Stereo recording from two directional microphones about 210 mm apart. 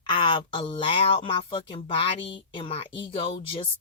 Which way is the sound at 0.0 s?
20° left (ahead or behind).